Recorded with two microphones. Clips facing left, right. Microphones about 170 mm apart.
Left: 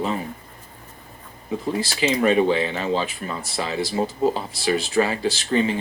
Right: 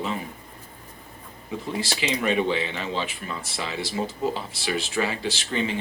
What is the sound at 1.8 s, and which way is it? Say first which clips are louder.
Speech: left 6 dB; 40° left (ahead or behind).